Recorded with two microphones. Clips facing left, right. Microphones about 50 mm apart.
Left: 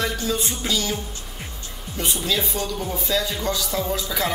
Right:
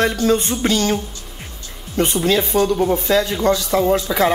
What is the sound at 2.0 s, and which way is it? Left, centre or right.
Speech, right.